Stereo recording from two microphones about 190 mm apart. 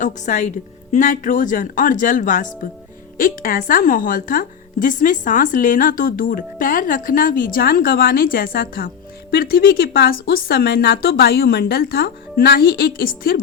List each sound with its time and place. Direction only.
0.0 s a woman's voice: 40° left (ahead or behind)